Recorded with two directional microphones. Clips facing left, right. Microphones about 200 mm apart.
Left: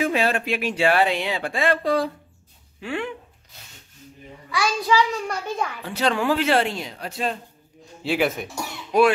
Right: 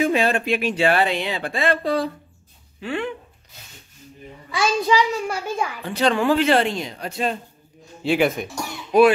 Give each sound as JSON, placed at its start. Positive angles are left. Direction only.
{"t": 0.0, "sound": "speech", "side_deg": 5}
{"t": 4.5, "sound": "a child's voice", "side_deg": -25}
{"t": 5.1, "sound": "speech", "side_deg": -5}